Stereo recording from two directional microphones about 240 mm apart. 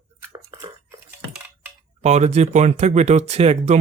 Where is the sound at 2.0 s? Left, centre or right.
Right.